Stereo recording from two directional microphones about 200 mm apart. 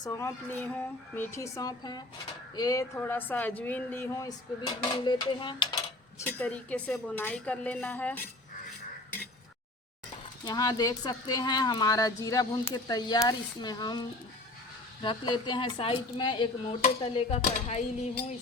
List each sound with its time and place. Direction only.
0.0 s a woman's voice: 15° left (ahead or behind)
6.1 s a woman's voice: 10° left (ahead or behind)
10.4 s speech: 20° left (ahead or behind)